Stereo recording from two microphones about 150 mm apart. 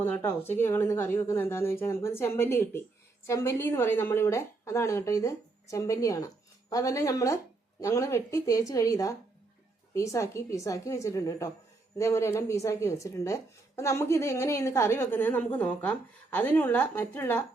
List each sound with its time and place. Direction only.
0.0 s a woman's voice: 15° left (ahead or behind)